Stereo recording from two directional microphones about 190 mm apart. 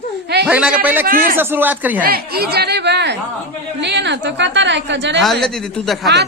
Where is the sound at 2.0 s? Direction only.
55° right (ahead or behind); by 5.2 s 70° right (ahead or behind).